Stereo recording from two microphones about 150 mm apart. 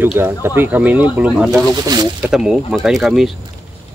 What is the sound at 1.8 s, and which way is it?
Speech, 25° right (ahead or behind).